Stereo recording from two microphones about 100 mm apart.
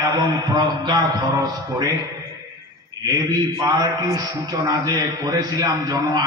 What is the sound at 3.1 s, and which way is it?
Speech, 50° right (ahead or behind).